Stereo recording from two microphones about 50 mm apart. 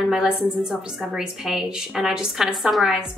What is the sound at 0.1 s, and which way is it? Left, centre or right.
A woman's voice, centre.